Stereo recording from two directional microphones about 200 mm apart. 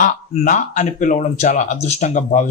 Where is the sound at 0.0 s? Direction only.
40° left (ahead or behind).